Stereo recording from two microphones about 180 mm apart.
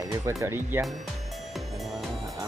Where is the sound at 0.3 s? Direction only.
15° right (ahead or behind).